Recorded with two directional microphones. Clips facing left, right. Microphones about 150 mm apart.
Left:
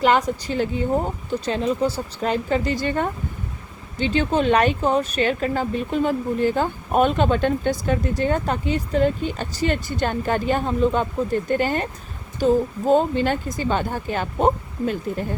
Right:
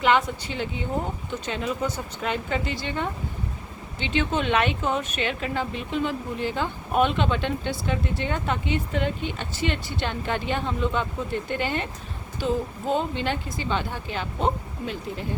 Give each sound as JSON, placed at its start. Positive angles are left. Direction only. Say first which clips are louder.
{"t": 0.0, "sound": "a woman's voice", "louder": "left 3 dB", "side_deg": 40}